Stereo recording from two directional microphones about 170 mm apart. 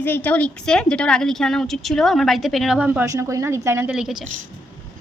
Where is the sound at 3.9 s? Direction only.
Centre (ahead or behind).